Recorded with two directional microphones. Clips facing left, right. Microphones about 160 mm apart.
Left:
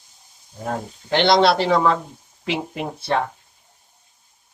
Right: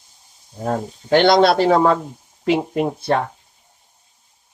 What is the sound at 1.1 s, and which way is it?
Speech, 45° right (ahead or behind).